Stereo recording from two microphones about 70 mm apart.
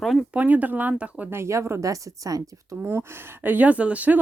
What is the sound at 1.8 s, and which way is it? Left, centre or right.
Speech, right.